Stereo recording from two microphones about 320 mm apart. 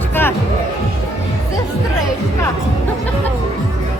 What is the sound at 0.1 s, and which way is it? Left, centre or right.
Music, centre.